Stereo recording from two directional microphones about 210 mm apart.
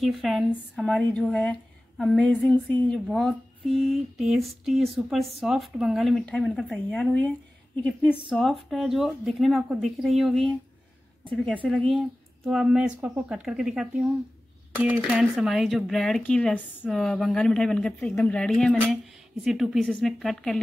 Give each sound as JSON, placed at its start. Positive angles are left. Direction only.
{"t": 0.0, "sound": "a woman's voice", "side_deg": 0}
{"t": 11.6, "sound": "a woman's voice", "side_deg": 5}